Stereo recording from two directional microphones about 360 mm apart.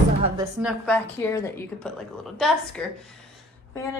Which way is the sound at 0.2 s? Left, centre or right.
Centre.